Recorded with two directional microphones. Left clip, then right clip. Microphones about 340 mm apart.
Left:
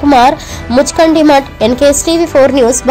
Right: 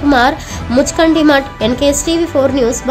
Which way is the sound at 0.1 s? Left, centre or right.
Centre.